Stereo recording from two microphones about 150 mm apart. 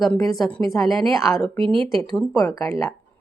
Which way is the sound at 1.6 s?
35° right (ahead or behind).